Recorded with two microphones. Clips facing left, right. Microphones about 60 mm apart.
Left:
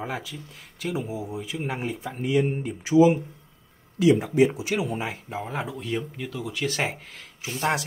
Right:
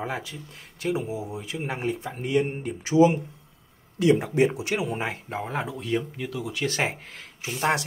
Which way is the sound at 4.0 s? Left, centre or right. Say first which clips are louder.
Left 1 dB; right.